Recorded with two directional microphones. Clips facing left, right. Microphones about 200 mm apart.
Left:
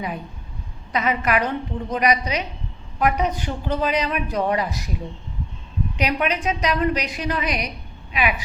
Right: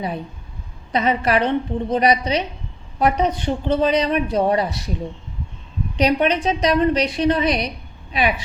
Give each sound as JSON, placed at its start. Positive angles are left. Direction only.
{"t": 0.9, "sound": "speech", "side_deg": -30}
{"t": 6.0, "sound": "speech", "side_deg": -30}